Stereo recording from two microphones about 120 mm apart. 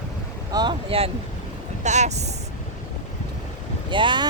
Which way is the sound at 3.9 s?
40° right (ahead or behind).